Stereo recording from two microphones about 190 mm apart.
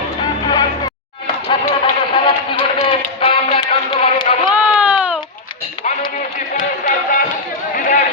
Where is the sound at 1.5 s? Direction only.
25° left (ahead or behind).